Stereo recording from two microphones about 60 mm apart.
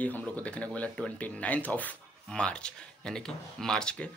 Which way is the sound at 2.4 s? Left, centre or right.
Centre.